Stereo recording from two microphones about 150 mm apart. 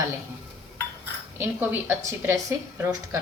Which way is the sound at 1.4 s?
15° right (ahead or behind).